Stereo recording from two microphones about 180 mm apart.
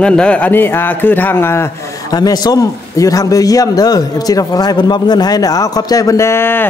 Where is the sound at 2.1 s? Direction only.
20° left (ahead or behind).